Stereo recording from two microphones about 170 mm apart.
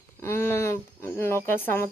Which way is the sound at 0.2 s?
15° left (ahead or behind).